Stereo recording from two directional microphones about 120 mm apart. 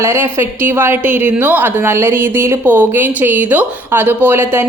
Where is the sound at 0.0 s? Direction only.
20° right (ahead or behind).